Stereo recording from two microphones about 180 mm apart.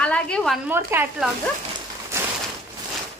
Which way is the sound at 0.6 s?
10° right (ahead or behind).